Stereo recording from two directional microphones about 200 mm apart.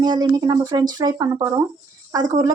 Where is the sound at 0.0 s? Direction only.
20° right (ahead or behind).